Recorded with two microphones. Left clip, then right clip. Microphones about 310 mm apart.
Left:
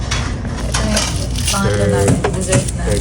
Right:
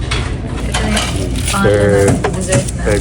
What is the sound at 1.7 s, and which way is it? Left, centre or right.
Speech, centre.